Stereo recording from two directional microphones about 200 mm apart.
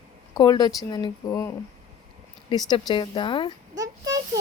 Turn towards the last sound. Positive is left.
turn(degrees=-20)  # may be behind; listen again after turning